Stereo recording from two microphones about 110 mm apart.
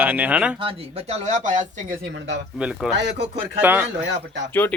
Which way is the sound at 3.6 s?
20° right (ahead or behind).